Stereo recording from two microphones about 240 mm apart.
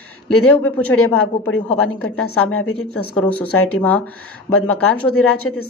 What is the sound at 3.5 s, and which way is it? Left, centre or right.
Speech, left.